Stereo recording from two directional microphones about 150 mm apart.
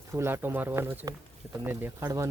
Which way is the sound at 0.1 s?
15° right (ahead or behind).